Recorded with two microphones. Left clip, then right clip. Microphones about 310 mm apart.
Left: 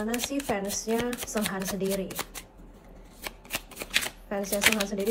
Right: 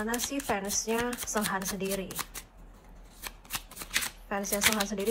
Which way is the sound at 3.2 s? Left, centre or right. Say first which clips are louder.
Left 4 dB; centre.